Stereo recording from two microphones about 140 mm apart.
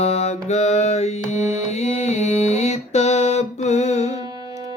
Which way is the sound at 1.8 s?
55° left (ahead or behind).